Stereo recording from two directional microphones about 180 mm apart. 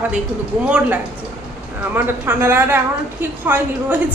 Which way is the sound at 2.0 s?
10° right (ahead or behind).